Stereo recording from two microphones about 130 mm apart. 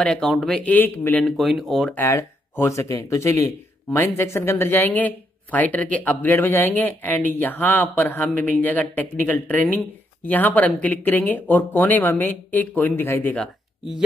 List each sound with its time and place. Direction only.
0.0 s speech: 5° left (ahead or behind)
0.6 s speech: 15° left (ahead or behind)
1.2 s speech: centre (ahead or behind)
2.0 s speech: 20° left (ahead or behind)